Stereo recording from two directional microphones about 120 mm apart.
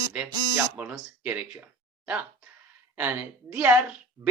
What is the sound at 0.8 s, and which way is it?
Speech, 10° right (ahead or behind).